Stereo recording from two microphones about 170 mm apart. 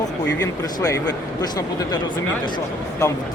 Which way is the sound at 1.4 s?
25° left (ahead or behind).